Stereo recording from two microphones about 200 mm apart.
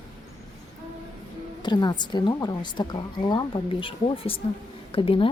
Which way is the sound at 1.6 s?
20° left (ahead or behind).